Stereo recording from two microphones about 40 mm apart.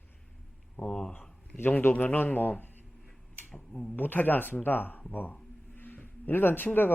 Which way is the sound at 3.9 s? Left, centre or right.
Left.